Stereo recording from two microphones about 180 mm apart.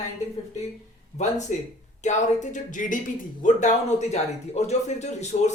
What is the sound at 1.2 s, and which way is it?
Speech, 40° left (ahead or behind).